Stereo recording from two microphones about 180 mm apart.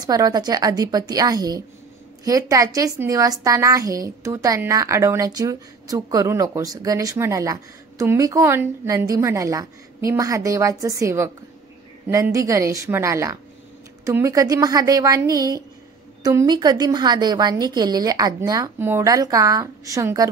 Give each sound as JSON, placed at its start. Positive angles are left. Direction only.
{"t": 0.0, "sound": "a woman's voice", "side_deg": -20}